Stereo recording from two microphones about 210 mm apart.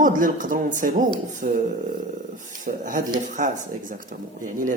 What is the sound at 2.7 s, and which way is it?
Speech, 40° right (ahead or behind).